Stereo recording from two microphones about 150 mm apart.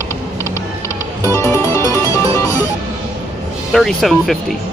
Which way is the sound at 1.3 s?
20° left (ahead or behind).